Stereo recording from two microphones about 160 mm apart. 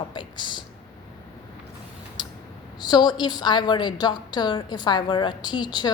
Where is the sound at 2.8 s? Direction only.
25° left (ahead or behind).